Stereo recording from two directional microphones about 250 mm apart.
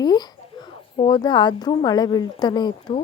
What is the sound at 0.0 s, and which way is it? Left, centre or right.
A woman's voice, centre.